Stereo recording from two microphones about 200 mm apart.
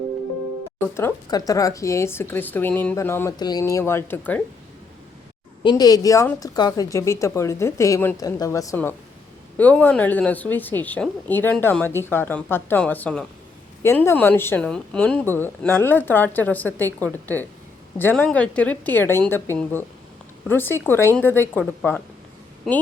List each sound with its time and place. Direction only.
0.9 s a woman's voice: 15° left (ahead or behind)
5.6 s a woman's voice: 20° left (ahead or behind); by 22.8 s centre (ahead or behind)